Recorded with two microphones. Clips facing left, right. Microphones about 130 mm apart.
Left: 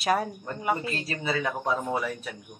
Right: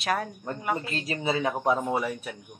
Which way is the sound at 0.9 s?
20° right (ahead or behind).